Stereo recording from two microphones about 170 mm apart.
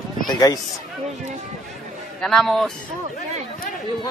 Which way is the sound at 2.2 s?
Centre (ahead or behind).